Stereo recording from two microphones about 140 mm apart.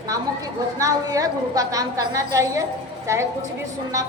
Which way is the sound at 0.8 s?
25° right (ahead or behind).